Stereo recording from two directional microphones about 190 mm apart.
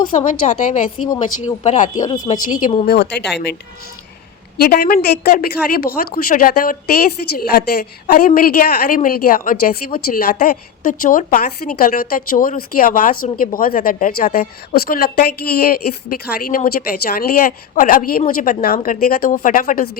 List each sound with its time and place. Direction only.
0.1 s a woman's voice: 40° left (ahead or behind)
2.8 s a woman's voice: 60° left (ahead or behind)
4.5 s speech: 55° left (ahead or behind)